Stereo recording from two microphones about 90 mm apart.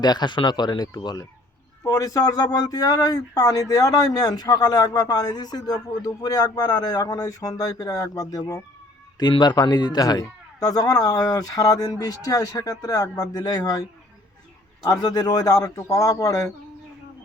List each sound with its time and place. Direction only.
0.0 s speech: 50° left (ahead or behind)
9.4 s speech: 50° left (ahead or behind)
14.8 s speech: 50° left (ahead or behind)